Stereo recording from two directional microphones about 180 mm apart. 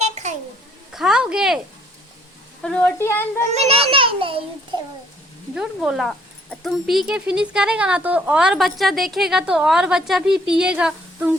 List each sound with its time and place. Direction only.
0.9 s speech: 5° right (ahead or behind)
2.6 s speech: 5° left (ahead or behind)
3.5 s a child's voice: 35° right (ahead or behind)
5.5 s speech: 5° right (ahead or behind)